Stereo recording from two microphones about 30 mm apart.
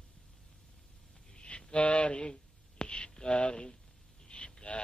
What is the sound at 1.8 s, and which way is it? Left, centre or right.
Speech, left.